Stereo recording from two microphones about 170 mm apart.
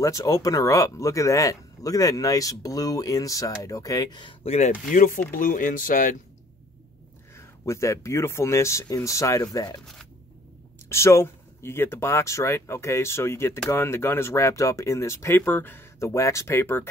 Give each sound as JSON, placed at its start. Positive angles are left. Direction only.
{"t": 0.0, "sound": "speech", "side_deg": 20}
{"t": 7.3, "sound": "speech", "side_deg": 15}
{"t": 10.9, "sound": "speech", "side_deg": 15}